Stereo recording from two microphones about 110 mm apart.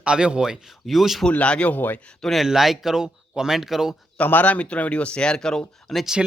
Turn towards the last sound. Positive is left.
turn(degrees=0)  # may be behind; listen again after turning